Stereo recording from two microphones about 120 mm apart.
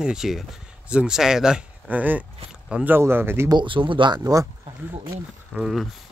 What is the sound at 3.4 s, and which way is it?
Speech, 40° right (ahead or behind).